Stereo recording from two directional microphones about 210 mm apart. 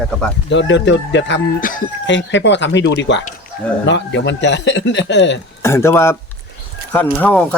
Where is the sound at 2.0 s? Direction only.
55° left (ahead or behind).